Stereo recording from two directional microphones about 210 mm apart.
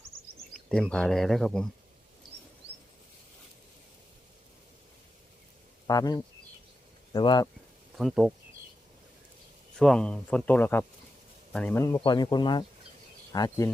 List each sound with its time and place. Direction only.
0.5 s speech: 5° left (ahead or behind)
5.9 s speech: 15° left (ahead or behind)
7.9 s speech: centre (ahead or behind)
9.7 s speech: 5° left (ahead or behind); by 13.7 s 20° left (ahead or behind)